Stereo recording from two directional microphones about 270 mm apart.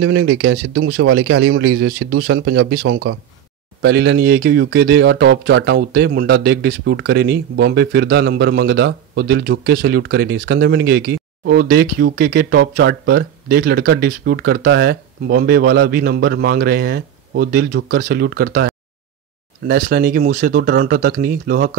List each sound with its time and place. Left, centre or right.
0.0 s speech: right
19.7 s speech: right